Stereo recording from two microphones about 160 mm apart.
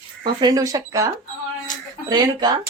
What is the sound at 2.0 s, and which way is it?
Speech, 25° right (ahead or behind).